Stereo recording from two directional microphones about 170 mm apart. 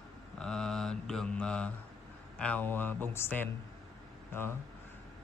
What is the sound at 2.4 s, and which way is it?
Speech, 10° left (ahead or behind).